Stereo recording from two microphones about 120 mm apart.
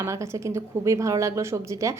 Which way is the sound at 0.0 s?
25° right (ahead or behind).